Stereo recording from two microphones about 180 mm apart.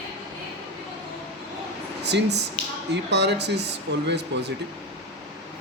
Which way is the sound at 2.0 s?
70° right (ahead or behind).